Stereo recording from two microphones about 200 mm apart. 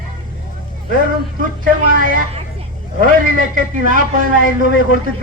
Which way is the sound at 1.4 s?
45° right (ahead or behind).